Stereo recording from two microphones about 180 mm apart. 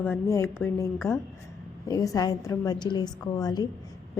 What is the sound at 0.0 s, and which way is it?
Speech, 15° left (ahead or behind).